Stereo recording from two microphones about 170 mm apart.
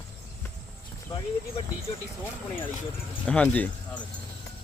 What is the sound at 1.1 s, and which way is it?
Speech, 20° left (ahead or behind).